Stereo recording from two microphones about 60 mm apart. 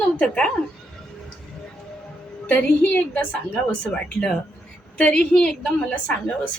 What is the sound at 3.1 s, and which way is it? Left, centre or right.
A woman's voice, centre.